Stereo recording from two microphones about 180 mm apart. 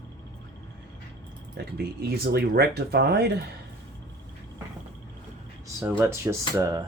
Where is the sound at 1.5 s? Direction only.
60° right (ahead or behind).